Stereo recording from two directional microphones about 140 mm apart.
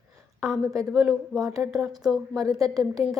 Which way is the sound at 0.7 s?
25° right (ahead or behind).